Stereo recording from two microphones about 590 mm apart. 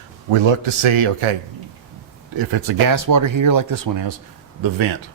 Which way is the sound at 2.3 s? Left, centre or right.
Right.